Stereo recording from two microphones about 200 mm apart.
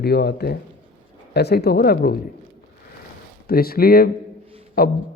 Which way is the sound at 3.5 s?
50° left (ahead or behind).